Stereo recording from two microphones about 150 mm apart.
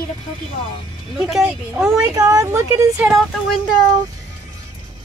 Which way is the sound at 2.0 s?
20° right (ahead or behind).